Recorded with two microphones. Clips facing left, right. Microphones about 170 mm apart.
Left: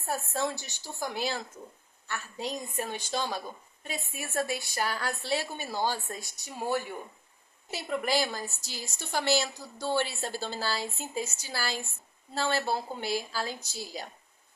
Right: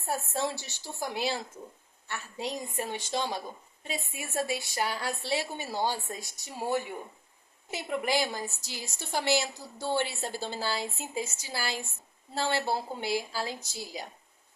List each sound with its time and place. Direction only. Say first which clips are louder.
0.1 s a woman's voice: even; 25° right (ahead or behind)